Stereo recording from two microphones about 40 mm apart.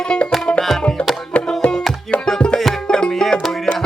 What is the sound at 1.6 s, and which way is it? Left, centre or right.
Music, centre.